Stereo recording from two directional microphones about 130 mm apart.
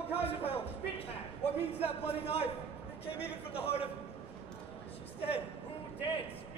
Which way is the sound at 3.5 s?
50° left (ahead or behind).